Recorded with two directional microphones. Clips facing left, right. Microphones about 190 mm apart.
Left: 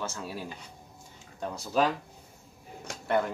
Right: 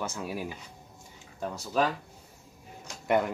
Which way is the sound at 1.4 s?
Centre (ahead or behind).